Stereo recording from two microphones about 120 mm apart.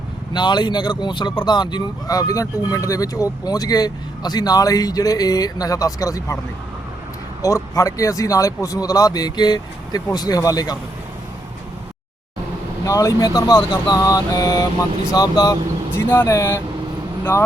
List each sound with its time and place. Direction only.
0.3 s speech: 40° left (ahead or behind)
7.4 s speech: 25° left (ahead or behind)
12.8 s speech: 30° left (ahead or behind)
16.0 s speech: 20° left (ahead or behind)